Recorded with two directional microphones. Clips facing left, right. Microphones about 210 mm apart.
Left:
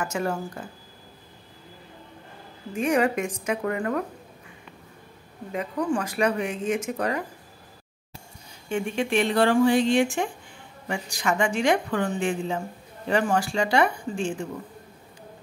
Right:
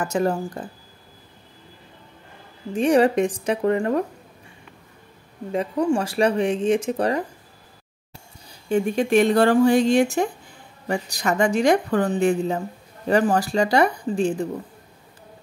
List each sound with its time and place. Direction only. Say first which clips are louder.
0.0 s a woman's voice: right 5 dB; 35° right (ahead or behind)
2.7 s a woman's voice: right 5 dB; 30° right (ahead or behind)
5.5 s speech: right 5 dB; 30° right (ahead or behind)
8.6 s a woman's voice: right 6 dB; 40° right (ahead or behind)